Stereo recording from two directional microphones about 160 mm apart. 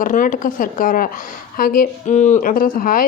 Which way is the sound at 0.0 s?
55° left (ahead or behind).